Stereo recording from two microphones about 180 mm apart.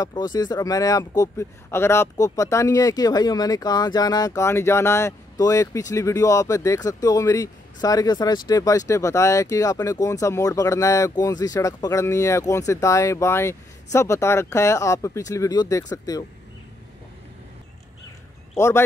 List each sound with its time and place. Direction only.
0.0 s speech: 20° left (ahead or behind)